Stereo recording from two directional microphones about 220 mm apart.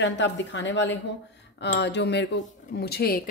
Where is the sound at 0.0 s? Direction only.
55° left (ahead or behind).